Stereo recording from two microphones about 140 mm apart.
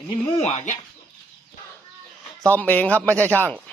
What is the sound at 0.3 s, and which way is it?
Speech, 50° left (ahead or behind).